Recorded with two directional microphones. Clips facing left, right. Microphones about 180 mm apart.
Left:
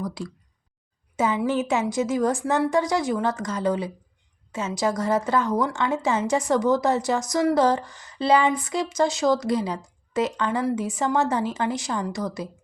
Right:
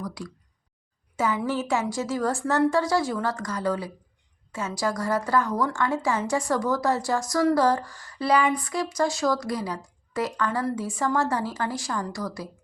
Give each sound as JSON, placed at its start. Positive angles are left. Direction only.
{"t": 0.0, "sound": "a woman's voice", "side_deg": 25}